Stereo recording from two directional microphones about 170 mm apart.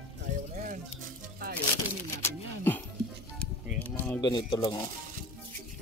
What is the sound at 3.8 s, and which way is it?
Speech, 10° left (ahead or behind).